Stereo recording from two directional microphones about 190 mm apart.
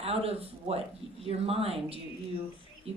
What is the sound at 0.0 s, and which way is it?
Speech, 30° right (ahead or behind).